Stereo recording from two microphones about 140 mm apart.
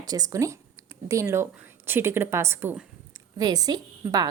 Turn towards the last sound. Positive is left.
turn(degrees=-25)  # may be behind; listen again after turning